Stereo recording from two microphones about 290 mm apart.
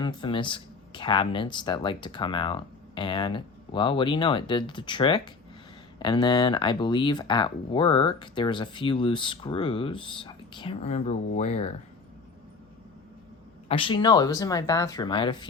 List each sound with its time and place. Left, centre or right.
0.0 s speech: centre
13.7 s speech: centre